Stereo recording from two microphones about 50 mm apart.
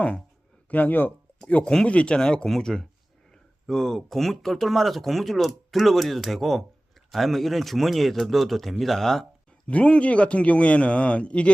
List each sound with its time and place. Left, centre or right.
0.7 s speech: left
1.4 s speech: left
1.6 s speech: centre
9.5 s a man's voice: left